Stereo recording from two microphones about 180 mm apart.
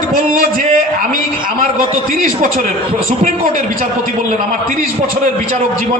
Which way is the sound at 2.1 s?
50° right (ahead or behind).